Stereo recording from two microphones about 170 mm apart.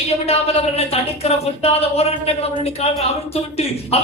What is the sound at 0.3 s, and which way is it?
Speech, 35° left (ahead or behind).